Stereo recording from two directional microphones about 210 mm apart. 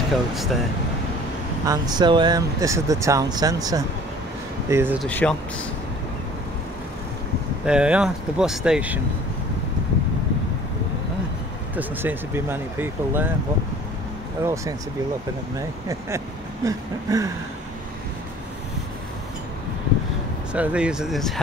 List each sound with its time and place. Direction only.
0.3 s speech: centre (ahead or behind)
1.7 s speech: 20° right (ahead or behind)
5.0 s speech: 5° left (ahead or behind)
7.6 s speech: 5° right (ahead or behind)
11.7 s speech: 10° right (ahead or behind)
14.4 s speech: 15° right (ahead or behind)
16.6 s speech: 15° right (ahead or behind)
20.5 s speech: 5° right (ahead or behind)